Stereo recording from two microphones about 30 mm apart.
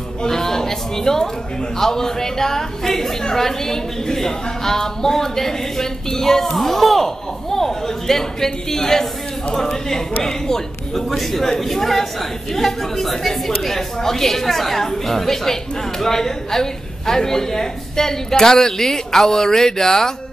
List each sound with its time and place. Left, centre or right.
0.3 s a woman's voice: centre
6.5 s a woman's voice: centre